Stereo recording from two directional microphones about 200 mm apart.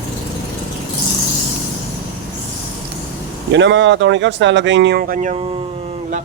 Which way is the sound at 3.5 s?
65° right (ahead or behind).